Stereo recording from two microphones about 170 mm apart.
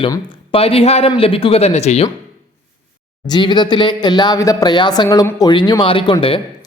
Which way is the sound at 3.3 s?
25° left (ahead or behind).